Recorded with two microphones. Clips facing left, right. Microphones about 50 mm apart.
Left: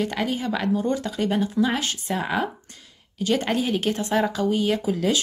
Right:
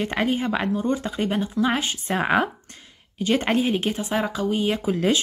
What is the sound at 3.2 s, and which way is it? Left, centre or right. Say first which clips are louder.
Speech: right 2 dB; right.